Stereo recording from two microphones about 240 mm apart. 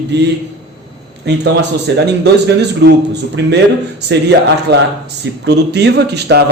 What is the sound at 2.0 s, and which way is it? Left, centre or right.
Speech, right.